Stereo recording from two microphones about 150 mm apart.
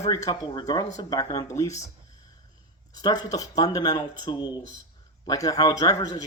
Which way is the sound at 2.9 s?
25° left (ahead or behind).